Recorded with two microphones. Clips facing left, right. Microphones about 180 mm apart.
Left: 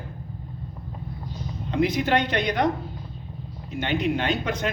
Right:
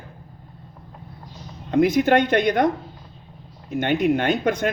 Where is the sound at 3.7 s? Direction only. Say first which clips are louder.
Right 5 dB; 50° right (ahead or behind).